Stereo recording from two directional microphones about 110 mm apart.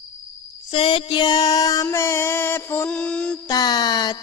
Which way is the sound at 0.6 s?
50° left (ahead or behind).